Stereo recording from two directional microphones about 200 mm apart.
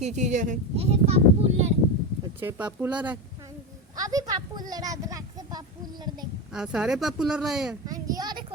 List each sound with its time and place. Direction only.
0.0 s speech: 35° right (ahead or behind)
2.4 s a woman's voice: 10° right (ahead or behind)
4.7 s child singing: 20° right (ahead or behind)
6.5 s speech: 5° right (ahead or behind)
7.9 s a woman's voice: 20° right (ahead or behind)